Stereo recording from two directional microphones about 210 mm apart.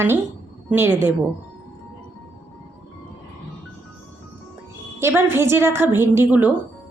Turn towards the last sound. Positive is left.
turn(degrees=-10)  # may be behind; listen again after turning